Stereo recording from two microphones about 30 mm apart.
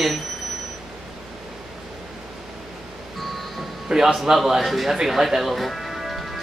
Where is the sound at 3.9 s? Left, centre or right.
Centre.